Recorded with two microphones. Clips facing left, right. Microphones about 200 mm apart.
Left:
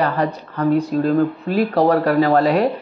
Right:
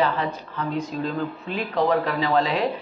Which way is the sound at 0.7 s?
55° left (ahead or behind).